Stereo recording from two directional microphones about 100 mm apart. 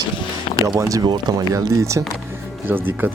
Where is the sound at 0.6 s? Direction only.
35° right (ahead or behind).